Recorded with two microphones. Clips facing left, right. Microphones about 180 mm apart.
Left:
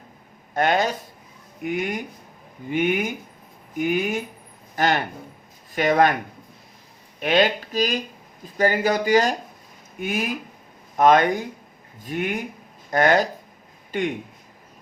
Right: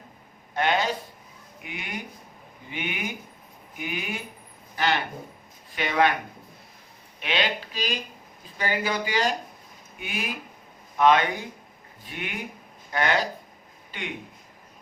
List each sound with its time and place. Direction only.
0.5 s speech: 45° left (ahead or behind)
7.2 s speech: 45° left (ahead or behind)